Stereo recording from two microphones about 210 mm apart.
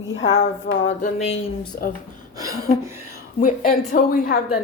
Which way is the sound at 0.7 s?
55° left (ahead or behind).